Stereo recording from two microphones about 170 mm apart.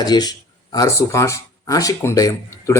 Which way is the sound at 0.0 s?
25° left (ahead or behind).